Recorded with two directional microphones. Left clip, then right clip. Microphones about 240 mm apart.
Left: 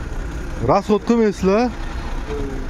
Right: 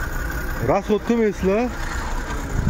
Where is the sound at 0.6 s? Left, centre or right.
Left.